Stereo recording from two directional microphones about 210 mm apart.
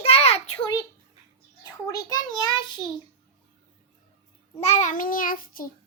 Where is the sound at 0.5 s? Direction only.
15° left (ahead or behind).